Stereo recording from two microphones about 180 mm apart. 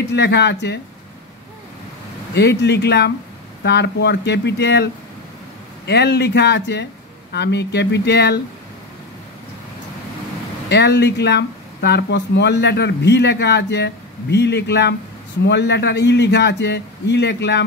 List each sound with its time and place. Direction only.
0.0 s speech: 70° left (ahead or behind)
2.3 s speech: 70° left (ahead or behind)
5.9 s speech: 65° left (ahead or behind)
10.7 s speech: 70° left (ahead or behind)